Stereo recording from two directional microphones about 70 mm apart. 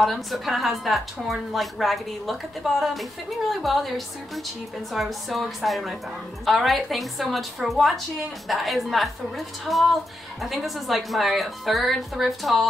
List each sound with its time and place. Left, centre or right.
0.0 s a woman's voice: centre